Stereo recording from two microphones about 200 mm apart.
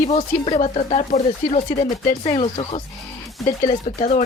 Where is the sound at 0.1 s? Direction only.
30° left (ahead or behind).